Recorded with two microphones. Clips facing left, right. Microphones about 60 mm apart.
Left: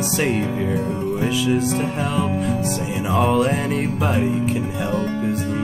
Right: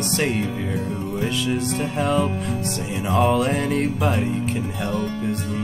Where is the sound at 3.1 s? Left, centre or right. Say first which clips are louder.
Left 1 dB; centre.